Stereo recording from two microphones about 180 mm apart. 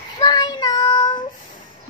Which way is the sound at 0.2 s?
20° left (ahead or behind).